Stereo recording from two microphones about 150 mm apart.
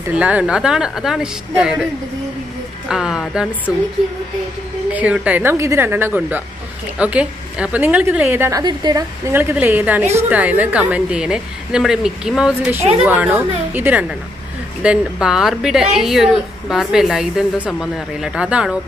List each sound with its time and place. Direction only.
0.1 s a woman's voice: 10° right (ahead or behind)
2.9 s a woman's voice: 5° right (ahead or behind)
3.7 s a woman's voice: 25° left (ahead or behind)
4.9 s a woman's voice: 10° right (ahead or behind); by 9.0 s 25° right (ahead or behind)
9.3 s a woman's voice: 15° right (ahead or behind)